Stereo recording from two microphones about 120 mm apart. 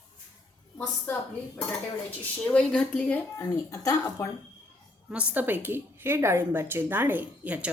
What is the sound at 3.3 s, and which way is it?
Speech, 25° left (ahead or behind).